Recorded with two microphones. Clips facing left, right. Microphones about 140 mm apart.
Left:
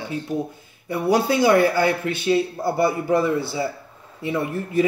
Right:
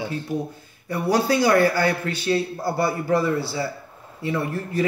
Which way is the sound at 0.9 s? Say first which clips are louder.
Left 1 dB; 20° left (ahead or behind).